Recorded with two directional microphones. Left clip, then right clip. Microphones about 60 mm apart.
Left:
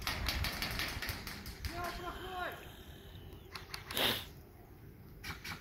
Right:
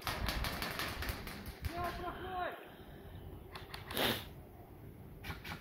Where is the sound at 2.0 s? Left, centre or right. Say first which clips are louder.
Right 1 dB; right.